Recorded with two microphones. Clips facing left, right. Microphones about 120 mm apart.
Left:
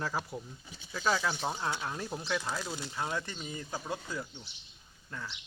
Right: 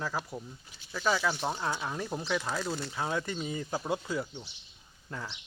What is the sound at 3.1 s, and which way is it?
Speech, 10° right (ahead or behind).